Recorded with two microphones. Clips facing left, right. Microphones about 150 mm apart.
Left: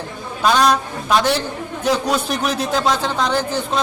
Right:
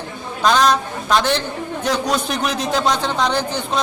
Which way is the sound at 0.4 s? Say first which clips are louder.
Even; 10° left (ahead or behind).